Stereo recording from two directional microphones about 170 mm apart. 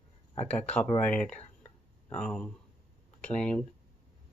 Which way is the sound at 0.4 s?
10° left (ahead or behind).